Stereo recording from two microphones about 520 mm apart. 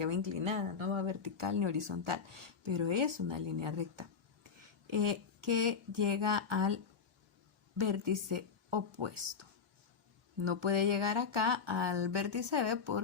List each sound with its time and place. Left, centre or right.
0.0 s speech: right
1.4 s speech: right
4.9 s speech: right
7.9 s speech: right